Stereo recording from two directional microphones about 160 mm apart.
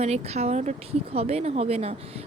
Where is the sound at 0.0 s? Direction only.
40° right (ahead or behind).